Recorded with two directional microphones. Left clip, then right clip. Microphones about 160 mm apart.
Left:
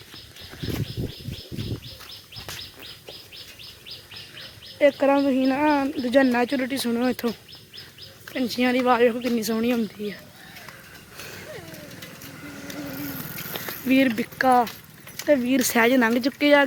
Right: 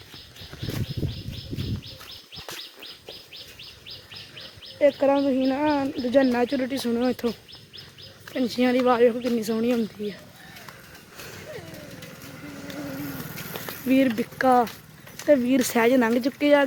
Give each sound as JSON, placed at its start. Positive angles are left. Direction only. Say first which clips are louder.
{"t": 4.8, "sound": "speech", "louder": "left 1 dB", "side_deg": 15}
{"t": 8.3, "sound": "speech", "louder": "even", "side_deg": -10}
{"t": 8.8, "sound": "speech", "louder": "even", "side_deg": 5}
{"t": 13.8, "sound": "speech", "louder": "left 1 dB", "side_deg": 0}
{"t": 15.2, "sound": "speech", "louder": "right 1 dB", "side_deg": -20}
{"t": 15.5, "sound": "speech", "louder": "left 1 dB", "side_deg": 0}